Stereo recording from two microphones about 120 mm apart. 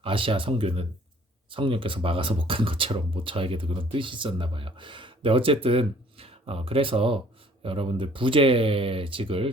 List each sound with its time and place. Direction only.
0.0 s speech: 50° right (ahead or behind)